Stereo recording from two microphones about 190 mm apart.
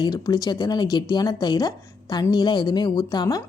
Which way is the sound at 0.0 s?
20° left (ahead or behind).